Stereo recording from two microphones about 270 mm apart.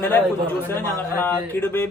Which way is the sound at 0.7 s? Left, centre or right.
Centre.